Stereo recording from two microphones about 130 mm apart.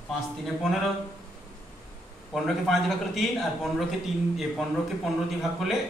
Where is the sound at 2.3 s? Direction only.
Centre (ahead or behind).